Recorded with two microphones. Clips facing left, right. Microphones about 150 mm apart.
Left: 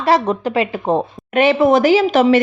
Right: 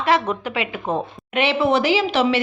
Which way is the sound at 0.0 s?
40° left (ahead or behind).